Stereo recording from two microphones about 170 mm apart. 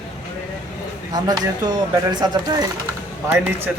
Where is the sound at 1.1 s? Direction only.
25° right (ahead or behind).